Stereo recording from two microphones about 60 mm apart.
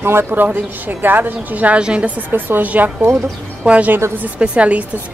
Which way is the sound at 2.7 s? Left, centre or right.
Right.